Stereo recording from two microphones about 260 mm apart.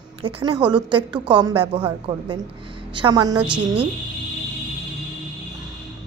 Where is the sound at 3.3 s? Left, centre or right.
Centre.